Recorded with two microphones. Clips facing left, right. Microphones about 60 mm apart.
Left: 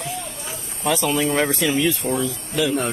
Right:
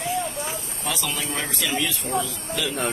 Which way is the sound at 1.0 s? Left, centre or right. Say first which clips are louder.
Left 9 dB; left.